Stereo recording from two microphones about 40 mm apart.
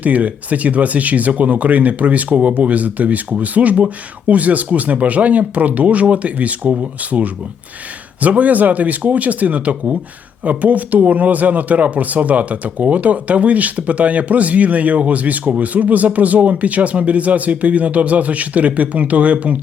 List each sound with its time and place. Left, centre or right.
0.0 s speech: right